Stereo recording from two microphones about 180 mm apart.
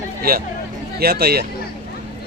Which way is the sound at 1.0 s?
60° right (ahead or behind).